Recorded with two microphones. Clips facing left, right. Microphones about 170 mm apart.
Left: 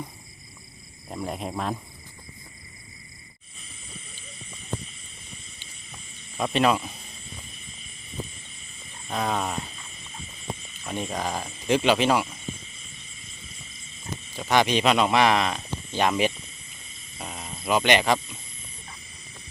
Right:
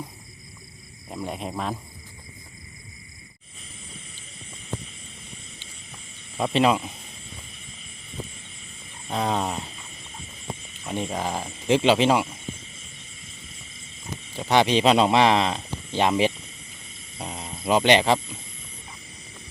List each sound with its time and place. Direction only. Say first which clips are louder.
1.1 s speech: even; centre (ahead or behind)
6.3 s speech: right 2 dB; 20° right (ahead or behind)
9.0 s speech: right 2 dB; 25° right (ahead or behind)
10.8 s speech: right 2 dB; 20° right (ahead or behind)
14.3 s speech: right 2 dB; 30° right (ahead or behind)